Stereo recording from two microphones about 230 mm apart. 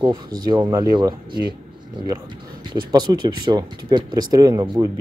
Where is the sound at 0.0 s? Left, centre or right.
Centre.